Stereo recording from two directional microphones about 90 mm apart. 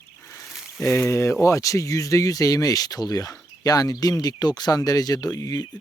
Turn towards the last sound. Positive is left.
turn(degrees=40)  # may be behind; listen again after turning